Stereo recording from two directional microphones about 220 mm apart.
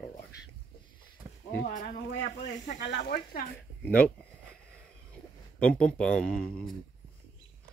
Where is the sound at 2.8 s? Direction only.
50° left (ahead or behind).